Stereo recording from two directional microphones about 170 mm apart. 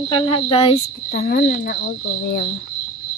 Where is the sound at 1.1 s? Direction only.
60° left (ahead or behind).